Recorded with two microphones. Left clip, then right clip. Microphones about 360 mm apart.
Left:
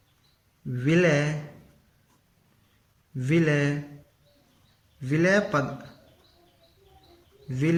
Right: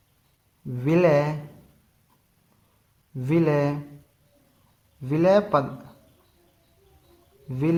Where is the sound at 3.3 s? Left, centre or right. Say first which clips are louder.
Right 2 dB; centre.